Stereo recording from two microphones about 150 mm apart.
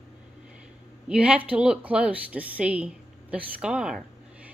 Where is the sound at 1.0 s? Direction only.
5° right (ahead or behind).